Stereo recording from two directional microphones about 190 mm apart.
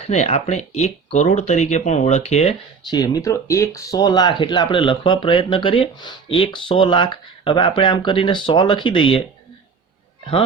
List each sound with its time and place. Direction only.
0.0 s speech: 35° left (ahead or behind)
2.9 s speech: 20° left (ahead or behind)